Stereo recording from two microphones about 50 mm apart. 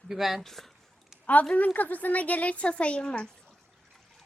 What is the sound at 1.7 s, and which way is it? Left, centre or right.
Speech, left.